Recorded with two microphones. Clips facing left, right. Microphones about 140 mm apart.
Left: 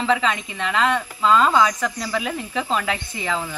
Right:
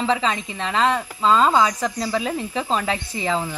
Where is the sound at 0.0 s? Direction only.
30° right (ahead or behind).